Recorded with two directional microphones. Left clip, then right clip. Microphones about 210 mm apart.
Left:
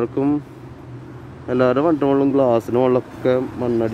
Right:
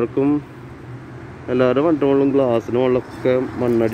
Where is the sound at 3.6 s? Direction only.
Centre (ahead or behind).